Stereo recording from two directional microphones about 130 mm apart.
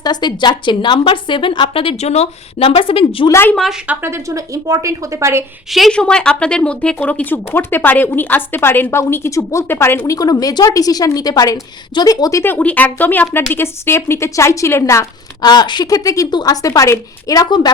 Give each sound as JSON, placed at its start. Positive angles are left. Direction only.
{"t": 0.0, "sound": "a woman's voice", "side_deg": 35}
{"t": 3.2, "sound": "a woman's voice", "side_deg": 20}
{"t": 3.5, "sound": "speech", "side_deg": 0}
{"t": 3.8, "sound": "speech", "side_deg": -20}
{"t": 5.7, "sound": "a woman's voice", "side_deg": 5}
{"t": 10.2, "sound": "a woman's voice", "side_deg": 30}